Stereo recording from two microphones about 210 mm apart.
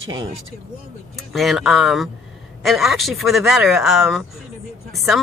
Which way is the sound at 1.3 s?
Centre (ahead or behind).